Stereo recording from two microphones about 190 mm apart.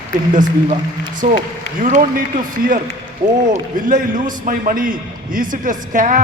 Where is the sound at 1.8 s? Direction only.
45° right (ahead or behind).